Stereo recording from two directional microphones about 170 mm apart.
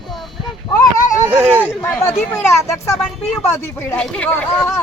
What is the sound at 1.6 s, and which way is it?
Speech, 10° left (ahead or behind).